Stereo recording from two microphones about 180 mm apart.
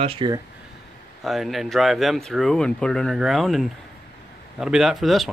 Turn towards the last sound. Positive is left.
turn(degrees=0)  # may be behind; listen again after turning